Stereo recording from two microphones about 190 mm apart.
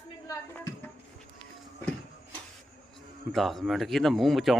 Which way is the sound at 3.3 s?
Centre (ahead or behind).